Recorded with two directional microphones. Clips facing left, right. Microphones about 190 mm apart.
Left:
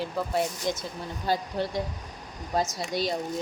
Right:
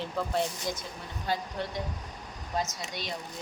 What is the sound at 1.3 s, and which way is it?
Speech, 35° left (ahead or behind).